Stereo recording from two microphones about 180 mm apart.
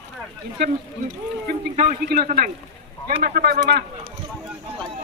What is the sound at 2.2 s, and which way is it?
Speech, 45° right (ahead or behind).